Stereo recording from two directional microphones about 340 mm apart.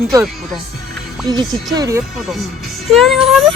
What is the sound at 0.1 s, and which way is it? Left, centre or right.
Speech, centre.